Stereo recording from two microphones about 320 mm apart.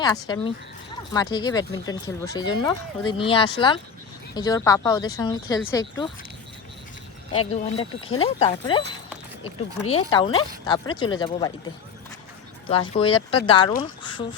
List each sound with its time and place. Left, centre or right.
0.0 s speech: centre
7.5 s speech: centre
12.6 s speech: centre
13.8 s a sound: centre